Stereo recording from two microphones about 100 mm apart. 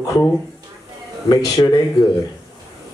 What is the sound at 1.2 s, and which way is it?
Speech, 40° left (ahead or behind).